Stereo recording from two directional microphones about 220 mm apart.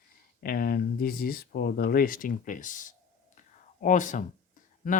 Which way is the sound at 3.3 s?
35° left (ahead or behind).